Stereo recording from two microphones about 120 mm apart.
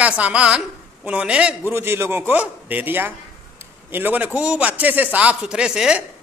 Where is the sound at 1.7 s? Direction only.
20° right (ahead or behind).